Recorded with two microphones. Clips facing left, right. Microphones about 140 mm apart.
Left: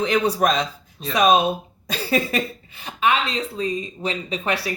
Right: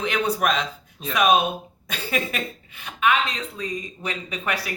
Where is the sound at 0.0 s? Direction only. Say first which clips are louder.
Left 4 dB; 35° left (ahead or behind).